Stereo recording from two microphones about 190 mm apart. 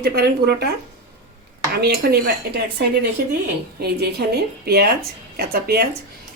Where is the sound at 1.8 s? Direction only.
60° right (ahead or behind).